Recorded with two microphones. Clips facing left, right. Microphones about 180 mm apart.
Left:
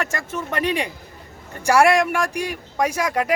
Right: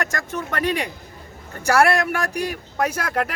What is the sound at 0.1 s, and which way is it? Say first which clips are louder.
A man's voice: left 1 dB; 10° left (ahead or behind).